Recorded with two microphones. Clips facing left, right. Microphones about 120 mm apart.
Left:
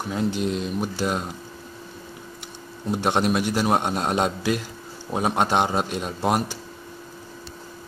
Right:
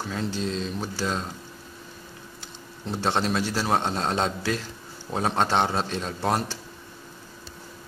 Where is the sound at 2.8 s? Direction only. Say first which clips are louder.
Left 3 dB; 15° left (ahead or behind).